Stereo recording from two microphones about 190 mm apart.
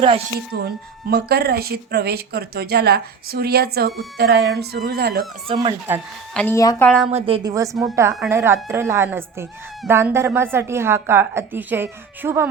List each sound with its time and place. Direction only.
0.3 s speech: 55° right (ahead or behind)
5.9 s a woman's voice: 10° right (ahead or behind)
6.3 s a woman's voice: 10° left (ahead or behind)
6.8 s a woman's voice: centre (ahead or behind)
7.1 s a woman's voice: 30° right (ahead or behind)
7.5 s a woman's voice: 15° right (ahead or behind)